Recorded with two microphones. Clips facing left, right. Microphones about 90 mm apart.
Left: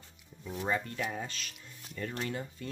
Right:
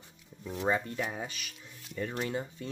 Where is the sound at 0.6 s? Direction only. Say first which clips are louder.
Right 3 dB; 20° right (ahead or behind).